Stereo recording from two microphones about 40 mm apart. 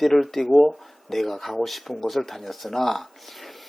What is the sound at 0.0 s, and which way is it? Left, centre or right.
Speech, centre.